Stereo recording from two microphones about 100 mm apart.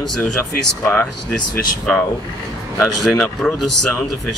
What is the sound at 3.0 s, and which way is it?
Speech, 5° left (ahead or behind).